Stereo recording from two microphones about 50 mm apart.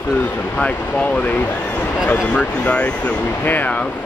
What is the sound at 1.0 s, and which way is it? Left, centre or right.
Speech, left.